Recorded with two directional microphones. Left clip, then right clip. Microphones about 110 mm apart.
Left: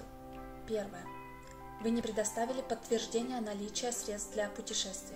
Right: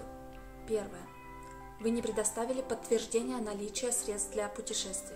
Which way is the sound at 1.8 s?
35° right (ahead or behind).